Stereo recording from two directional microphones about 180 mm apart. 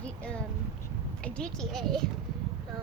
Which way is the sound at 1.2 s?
5° left (ahead or behind).